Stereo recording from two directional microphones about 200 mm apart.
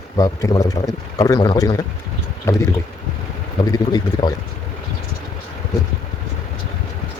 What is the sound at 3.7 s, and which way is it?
Speech, 20° left (ahead or behind).